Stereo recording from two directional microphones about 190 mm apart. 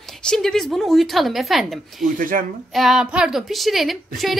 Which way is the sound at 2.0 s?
50° right (ahead or behind).